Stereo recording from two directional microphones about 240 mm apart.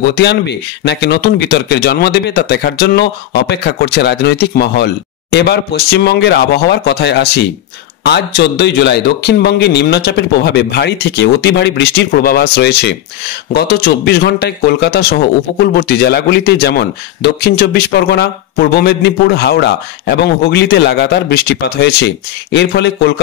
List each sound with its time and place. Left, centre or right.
0.1 s a man's voice: left